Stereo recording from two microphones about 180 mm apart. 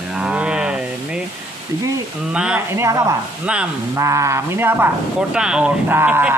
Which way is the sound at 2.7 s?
15° right (ahead or behind).